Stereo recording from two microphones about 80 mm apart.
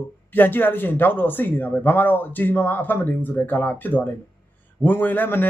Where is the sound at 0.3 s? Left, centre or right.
Left.